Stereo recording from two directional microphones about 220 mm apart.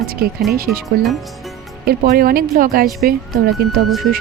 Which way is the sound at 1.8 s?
40° right (ahead or behind).